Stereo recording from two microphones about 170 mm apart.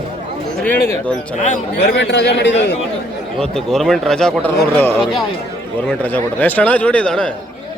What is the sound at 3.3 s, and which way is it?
A man's voice, 5° left (ahead or behind).